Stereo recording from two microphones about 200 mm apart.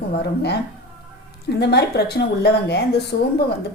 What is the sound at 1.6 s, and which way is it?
A woman's voice, 55° left (ahead or behind).